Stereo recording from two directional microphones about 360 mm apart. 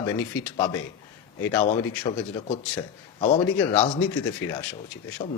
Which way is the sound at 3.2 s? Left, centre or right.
Centre.